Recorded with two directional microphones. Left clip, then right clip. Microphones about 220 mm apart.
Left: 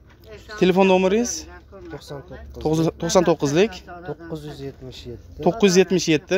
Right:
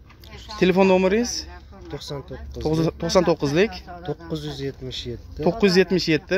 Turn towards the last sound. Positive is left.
turn(degrees=10)  # may be behind; listen again after turning